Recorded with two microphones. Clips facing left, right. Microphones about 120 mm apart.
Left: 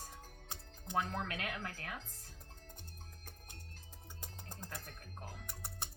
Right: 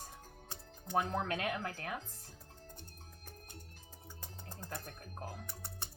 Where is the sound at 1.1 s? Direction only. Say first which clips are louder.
Right 5 dB; 25° right (ahead or behind).